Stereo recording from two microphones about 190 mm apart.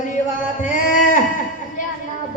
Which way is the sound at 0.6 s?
45° left (ahead or behind).